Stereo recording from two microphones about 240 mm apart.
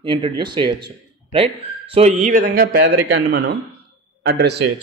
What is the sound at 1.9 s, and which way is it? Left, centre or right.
A man's voice, right.